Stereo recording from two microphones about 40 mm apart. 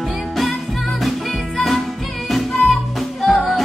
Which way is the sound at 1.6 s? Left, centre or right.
Centre.